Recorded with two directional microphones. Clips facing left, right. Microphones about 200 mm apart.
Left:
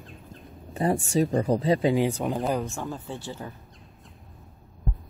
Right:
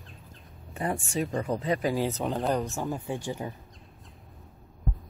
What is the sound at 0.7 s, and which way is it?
Speech, 35° left (ahead or behind).